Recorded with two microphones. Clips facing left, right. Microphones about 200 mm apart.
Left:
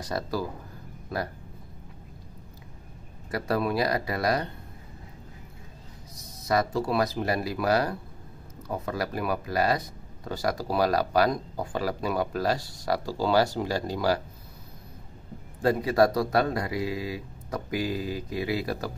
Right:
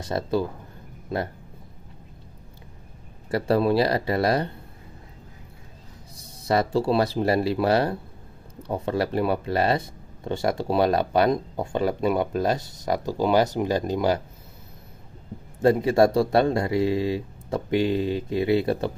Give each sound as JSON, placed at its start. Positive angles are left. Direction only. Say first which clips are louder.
{"t": 0.0, "sound": "speech", "louder": "right 5 dB", "side_deg": -25}
{"t": 3.3, "sound": "speech", "louder": "right 6 dB", "side_deg": -30}
{"t": 6.1, "sound": "speech", "louder": "right 3 dB", "side_deg": -30}
{"t": 15.6, "sound": "speech", "louder": "right 4 dB", "side_deg": -25}